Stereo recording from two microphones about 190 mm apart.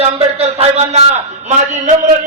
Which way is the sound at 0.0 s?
35° right (ahead or behind).